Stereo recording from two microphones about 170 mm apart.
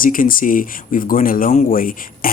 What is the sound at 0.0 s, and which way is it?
Speech, 55° left (ahead or behind).